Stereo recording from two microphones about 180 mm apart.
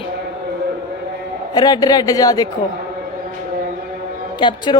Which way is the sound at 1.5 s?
20° left (ahead or behind).